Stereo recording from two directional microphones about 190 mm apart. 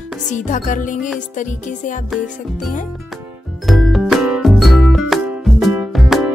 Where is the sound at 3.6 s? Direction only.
Centre (ahead or behind).